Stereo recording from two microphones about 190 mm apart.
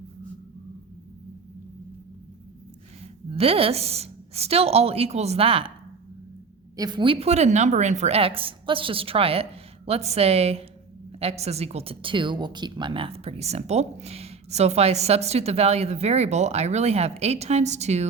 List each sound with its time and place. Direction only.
3.2 s a woman's voice: 30° right (ahead or behind)
6.7 s a woman's voice: 20° right (ahead or behind)